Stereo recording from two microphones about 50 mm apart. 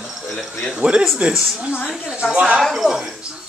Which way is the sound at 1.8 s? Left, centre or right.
Centre.